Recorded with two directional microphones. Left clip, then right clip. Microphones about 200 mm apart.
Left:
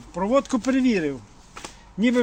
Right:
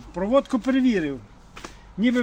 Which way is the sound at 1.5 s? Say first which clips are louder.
Left 1 dB; 25° left (ahead or behind).